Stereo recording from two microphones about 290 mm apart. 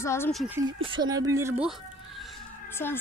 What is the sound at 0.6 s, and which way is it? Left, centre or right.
Speech, centre.